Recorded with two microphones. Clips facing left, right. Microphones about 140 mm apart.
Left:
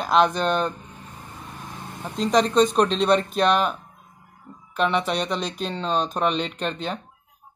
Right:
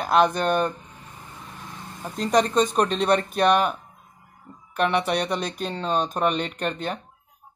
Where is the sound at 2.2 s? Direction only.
10° right (ahead or behind).